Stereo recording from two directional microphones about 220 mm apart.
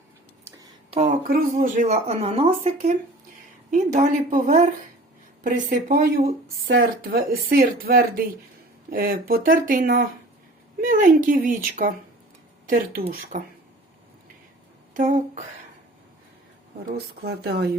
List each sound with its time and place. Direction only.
0.6 s a sound: 25° right (ahead or behind)
1.3 s speech: 40° right (ahead or behind)
3.9 s speech: 35° right (ahead or behind)
13.0 s speech: 40° right (ahead or behind)
14.9 s speech: 35° right (ahead or behind)
16.8 s speech: 45° right (ahead or behind)